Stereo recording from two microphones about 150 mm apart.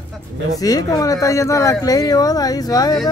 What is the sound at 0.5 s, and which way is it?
Speech, 25° left (ahead or behind).